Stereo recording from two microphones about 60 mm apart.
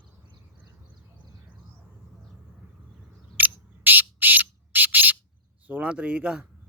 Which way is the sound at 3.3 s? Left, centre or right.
Right.